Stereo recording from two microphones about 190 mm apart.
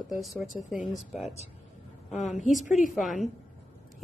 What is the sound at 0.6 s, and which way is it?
Speech, 5° right (ahead or behind).